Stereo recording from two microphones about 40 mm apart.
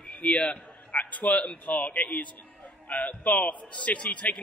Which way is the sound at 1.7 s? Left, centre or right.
Left.